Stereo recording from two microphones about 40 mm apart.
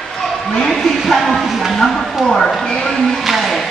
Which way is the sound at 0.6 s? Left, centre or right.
Centre.